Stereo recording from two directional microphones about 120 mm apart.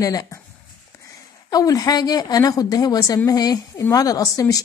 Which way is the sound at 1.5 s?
30° left (ahead or behind).